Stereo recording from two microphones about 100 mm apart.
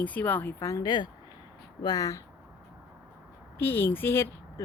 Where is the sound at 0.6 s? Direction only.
40° left (ahead or behind).